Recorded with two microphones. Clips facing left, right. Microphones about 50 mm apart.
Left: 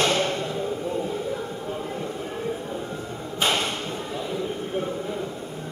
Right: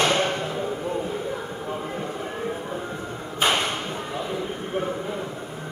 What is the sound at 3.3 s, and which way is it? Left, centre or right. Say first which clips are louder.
Whip: right 2 dB; centre.